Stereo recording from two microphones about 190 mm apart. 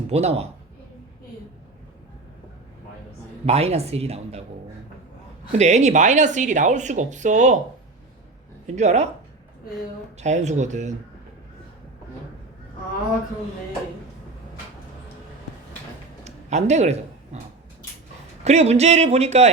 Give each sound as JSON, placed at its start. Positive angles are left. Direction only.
{"t": 0.1, "sound": "speech", "side_deg": -35}
{"t": 3.4, "sound": "speech", "side_deg": -35}
{"t": 5.5, "sound": "speech", "side_deg": -35}
{"t": 8.6, "sound": "speech", "side_deg": -35}
{"t": 10.2, "sound": "speech", "side_deg": -35}
{"t": 16.2, "sound": "a sound", "side_deg": -35}
{"t": 18.4, "sound": "speech", "side_deg": -35}